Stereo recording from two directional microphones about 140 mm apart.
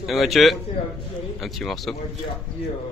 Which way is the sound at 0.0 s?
Centre (ahead or behind).